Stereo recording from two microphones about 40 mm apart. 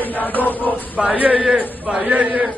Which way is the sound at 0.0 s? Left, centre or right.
Left.